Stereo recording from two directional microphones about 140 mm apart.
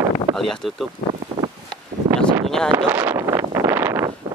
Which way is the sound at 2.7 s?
15° right (ahead or behind).